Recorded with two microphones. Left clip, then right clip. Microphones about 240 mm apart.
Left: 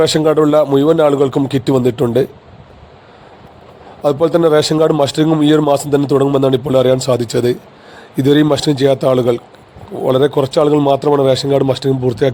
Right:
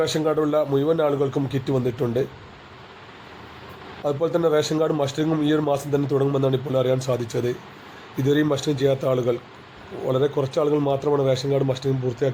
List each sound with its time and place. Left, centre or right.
0.0 s a man's voice: left
4.0 s a man's voice: left